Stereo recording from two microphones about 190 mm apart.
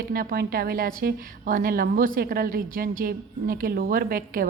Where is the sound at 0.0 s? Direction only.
50° right (ahead or behind).